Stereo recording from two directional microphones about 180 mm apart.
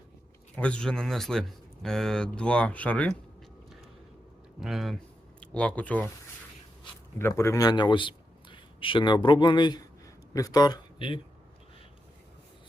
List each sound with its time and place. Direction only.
0.5 s a man's voice: 5° left (ahead or behind)
4.6 s a man's voice: centre (ahead or behind)
7.2 s a man's voice: 15° left (ahead or behind)